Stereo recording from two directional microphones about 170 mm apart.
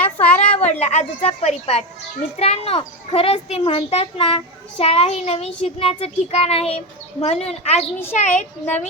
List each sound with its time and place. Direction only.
0.4 s a woman's voice: 40° left (ahead or behind)